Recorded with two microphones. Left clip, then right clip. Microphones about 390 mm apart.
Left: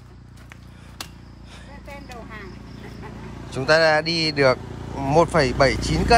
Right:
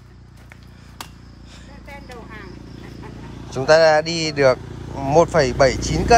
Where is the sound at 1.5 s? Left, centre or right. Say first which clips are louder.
Even; centre.